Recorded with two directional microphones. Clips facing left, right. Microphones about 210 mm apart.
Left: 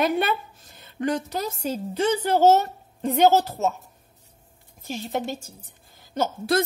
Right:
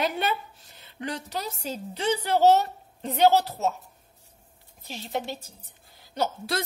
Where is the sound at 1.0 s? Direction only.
50° left (ahead or behind).